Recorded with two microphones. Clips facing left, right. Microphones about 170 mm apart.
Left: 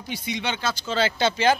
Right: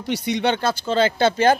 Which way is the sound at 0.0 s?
65° right (ahead or behind).